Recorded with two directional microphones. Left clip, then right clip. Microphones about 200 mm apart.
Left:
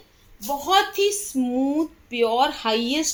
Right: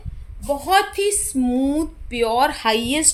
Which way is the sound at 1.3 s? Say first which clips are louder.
Right 3 dB; 25° right (ahead or behind).